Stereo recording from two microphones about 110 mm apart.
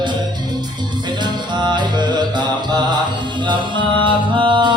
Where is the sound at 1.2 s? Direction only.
40° right (ahead or behind).